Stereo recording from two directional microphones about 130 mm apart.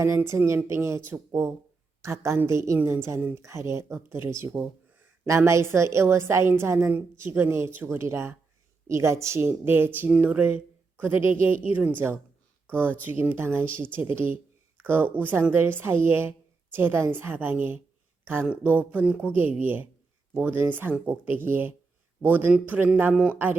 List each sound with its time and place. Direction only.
0.0 s a woman's voice: 20° right (ahead or behind)